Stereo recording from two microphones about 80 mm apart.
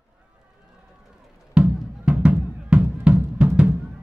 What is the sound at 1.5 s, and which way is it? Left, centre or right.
Music, centre.